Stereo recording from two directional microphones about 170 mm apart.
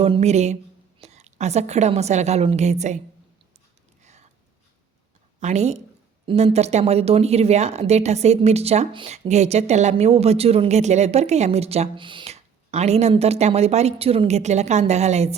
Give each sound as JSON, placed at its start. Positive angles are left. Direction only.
{"t": 0.0, "sound": "a woman's voice", "side_deg": -40}
{"t": 4.0, "sound": "a sound", "side_deg": -40}
{"t": 5.4, "sound": "speech", "side_deg": -40}